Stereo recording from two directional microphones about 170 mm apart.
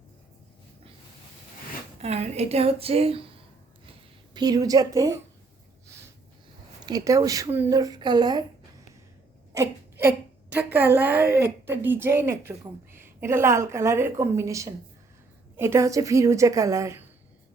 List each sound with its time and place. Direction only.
2.0 s speech: 40° right (ahead or behind)
4.4 s speech: 25° right (ahead or behind)
6.8 s speech: 20° right (ahead or behind)
9.5 s wail: 20° right (ahead or behind)
10.5 s a woman's voice: 10° right (ahead or behind)